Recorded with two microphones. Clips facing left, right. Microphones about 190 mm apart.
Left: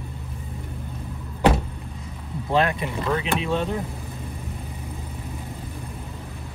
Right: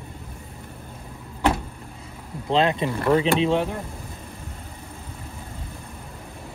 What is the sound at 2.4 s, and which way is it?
Speech, 20° right (ahead or behind).